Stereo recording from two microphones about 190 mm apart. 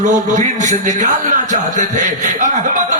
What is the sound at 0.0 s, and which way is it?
Speech, 40° right (ahead or behind).